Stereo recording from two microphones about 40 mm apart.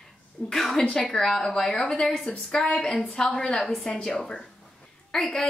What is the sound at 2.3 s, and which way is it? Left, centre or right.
A woman's voice, left.